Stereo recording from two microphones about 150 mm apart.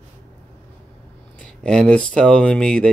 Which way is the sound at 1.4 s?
5° left (ahead or behind).